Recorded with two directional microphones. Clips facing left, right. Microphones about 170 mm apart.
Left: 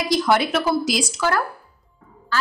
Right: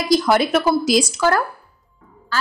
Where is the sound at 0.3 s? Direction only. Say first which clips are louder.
Right 3 dB; 40° right (ahead or behind).